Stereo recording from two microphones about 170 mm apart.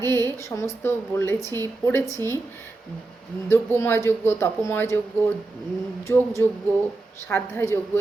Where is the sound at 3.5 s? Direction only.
15° left (ahead or behind).